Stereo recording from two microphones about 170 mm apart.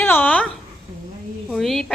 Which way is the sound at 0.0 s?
10° left (ahead or behind).